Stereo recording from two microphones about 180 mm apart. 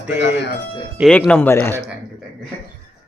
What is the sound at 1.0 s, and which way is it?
Speech, 5° left (ahead or behind).